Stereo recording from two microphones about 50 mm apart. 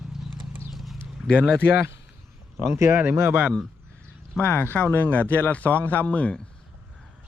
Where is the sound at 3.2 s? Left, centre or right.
Right.